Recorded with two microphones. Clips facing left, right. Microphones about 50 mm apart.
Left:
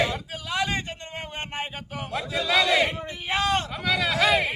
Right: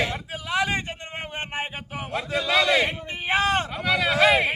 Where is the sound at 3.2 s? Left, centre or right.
Right.